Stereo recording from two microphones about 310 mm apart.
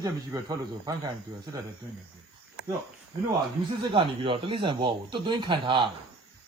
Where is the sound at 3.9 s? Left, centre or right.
Centre.